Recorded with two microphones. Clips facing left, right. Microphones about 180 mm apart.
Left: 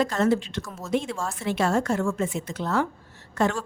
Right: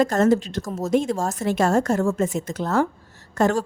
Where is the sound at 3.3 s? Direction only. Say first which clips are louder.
Right 4 dB; 45° right (ahead or behind).